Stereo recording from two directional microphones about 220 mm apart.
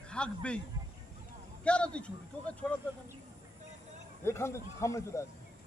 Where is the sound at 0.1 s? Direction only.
5° left (ahead or behind).